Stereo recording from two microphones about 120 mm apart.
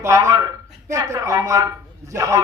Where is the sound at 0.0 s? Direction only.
25° right (ahead or behind).